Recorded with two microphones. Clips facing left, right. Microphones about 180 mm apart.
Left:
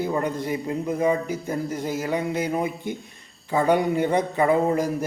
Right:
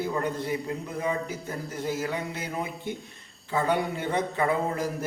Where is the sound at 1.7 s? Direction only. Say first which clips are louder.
Left 1 dB; 15° left (ahead or behind).